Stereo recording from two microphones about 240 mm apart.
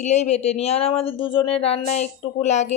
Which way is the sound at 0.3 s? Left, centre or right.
Left.